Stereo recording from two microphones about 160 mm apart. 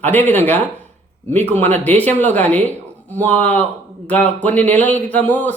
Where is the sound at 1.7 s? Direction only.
10° left (ahead or behind).